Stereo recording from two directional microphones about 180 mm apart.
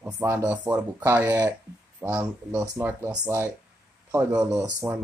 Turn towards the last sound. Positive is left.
turn(degrees=-20)  # may be behind; listen again after turning